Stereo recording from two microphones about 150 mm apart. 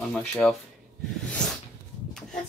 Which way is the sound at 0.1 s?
5° left (ahead or behind).